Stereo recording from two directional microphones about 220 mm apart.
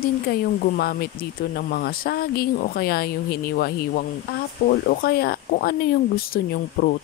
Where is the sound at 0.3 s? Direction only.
45° left (ahead or behind).